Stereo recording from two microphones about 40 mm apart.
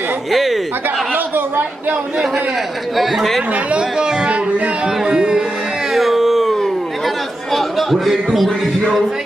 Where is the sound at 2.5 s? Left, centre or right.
Centre.